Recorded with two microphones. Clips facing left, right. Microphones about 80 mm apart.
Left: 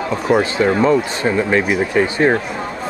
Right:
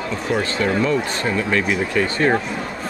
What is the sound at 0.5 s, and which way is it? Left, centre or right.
Speech, left.